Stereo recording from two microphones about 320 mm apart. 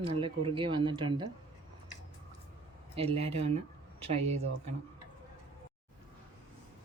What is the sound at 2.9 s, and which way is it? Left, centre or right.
Speech, centre.